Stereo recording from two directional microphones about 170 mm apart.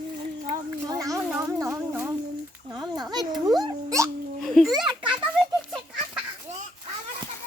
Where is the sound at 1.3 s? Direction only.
15° right (ahead or behind).